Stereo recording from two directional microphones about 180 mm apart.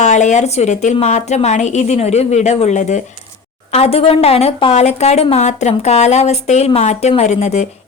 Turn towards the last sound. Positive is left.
turn(degrees=40)  # may be behind; listen again after turning